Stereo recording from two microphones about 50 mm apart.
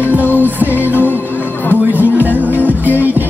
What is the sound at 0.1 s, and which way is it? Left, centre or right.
Music, right.